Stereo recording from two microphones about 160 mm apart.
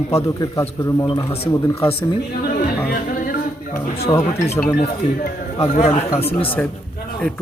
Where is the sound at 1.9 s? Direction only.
35° left (ahead or behind).